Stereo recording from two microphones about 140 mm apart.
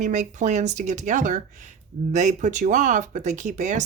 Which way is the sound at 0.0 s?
60° right (ahead or behind).